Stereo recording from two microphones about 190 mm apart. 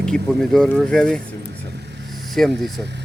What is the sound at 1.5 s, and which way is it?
Vehicle, 60° right (ahead or behind).